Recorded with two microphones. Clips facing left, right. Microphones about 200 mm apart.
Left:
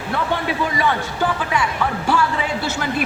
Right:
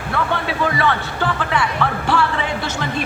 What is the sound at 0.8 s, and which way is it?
Speech, 10° left (ahead or behind).